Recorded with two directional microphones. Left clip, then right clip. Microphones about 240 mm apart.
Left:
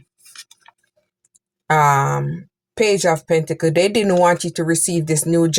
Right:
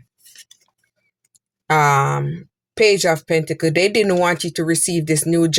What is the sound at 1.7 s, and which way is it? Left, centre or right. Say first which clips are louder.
Speech: even; right.